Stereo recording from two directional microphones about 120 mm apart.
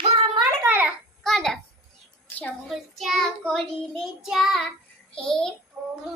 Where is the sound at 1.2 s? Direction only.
5° left (ahead or behind).